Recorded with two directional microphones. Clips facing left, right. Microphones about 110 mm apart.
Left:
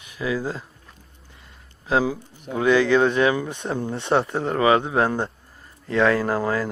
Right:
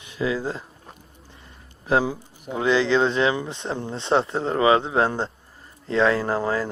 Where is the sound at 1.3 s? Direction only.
20° right (ahead or behind).